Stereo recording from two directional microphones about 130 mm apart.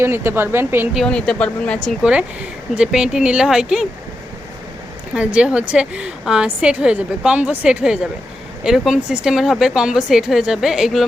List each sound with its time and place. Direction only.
0.0 s a woman's voice: 15° right (ahead or behind)
0.9 s a woman's voice: 5° left (ahead or behind)
5.1 s a woman's voice: 10° right (ahead or behind)